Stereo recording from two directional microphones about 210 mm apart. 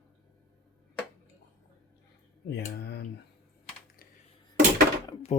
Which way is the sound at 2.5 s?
55° left (ahead or behind).